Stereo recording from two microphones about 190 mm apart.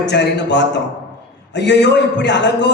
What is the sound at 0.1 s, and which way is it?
A man's voice, 65° left (ahead or behind).